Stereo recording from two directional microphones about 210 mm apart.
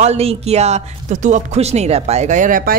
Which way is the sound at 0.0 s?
30° right (ahead or behind).